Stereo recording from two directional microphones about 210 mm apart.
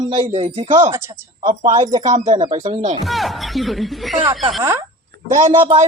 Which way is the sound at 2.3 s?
20° right (ahead or behind).